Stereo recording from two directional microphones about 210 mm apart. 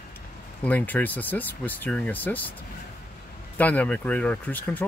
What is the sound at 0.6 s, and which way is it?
Speech, 10° left (ahead or behind).